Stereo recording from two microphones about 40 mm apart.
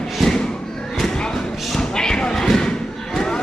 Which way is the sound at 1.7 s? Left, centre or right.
Centre.